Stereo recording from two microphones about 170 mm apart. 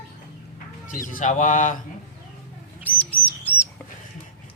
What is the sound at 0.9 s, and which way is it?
Speech, 50° left (ahead or behind).